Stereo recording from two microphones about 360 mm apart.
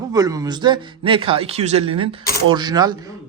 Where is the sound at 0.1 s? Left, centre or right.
Centre.